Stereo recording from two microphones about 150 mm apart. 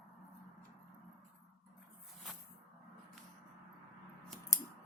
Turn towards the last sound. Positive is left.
turn(degrees=20)  # may be behind; listen again after turning